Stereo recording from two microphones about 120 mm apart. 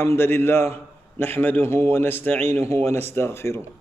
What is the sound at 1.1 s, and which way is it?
A man's voice, 15° left (ahead or behind).